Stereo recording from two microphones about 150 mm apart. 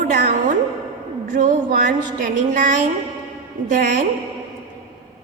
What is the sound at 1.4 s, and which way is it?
A woman's voice, 60° right (ahead or behind).